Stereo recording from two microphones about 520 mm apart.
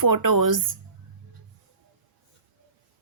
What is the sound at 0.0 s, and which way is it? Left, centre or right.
Speech, right.